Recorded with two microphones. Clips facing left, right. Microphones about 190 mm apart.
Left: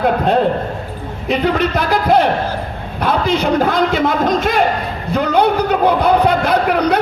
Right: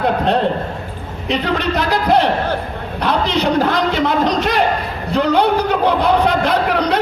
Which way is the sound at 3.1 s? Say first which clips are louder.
Left 1 dB; 50° left (ahead or behind).